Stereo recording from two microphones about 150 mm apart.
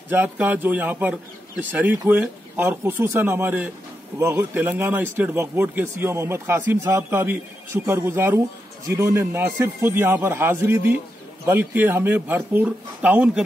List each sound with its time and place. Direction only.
0.1 s speech: 10° right (ahead or behind)